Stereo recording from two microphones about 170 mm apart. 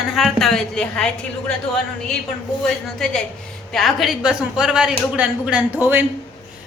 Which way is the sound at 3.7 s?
Centre (ahead or behind).